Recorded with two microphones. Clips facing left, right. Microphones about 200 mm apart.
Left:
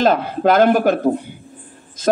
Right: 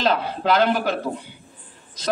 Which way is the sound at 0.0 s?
50° left (ahead or behind).